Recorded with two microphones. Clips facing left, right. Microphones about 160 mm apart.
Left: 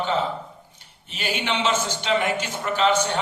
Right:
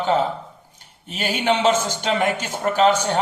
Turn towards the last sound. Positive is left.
turn(degrees=-45)  # may be behind; listen again after turning